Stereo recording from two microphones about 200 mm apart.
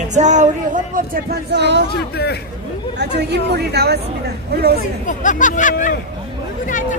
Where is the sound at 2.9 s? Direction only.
55° right (ahead or behind).